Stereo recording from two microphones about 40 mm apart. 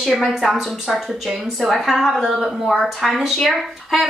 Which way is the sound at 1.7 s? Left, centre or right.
Centre.